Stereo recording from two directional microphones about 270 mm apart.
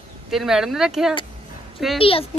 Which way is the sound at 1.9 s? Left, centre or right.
Centre.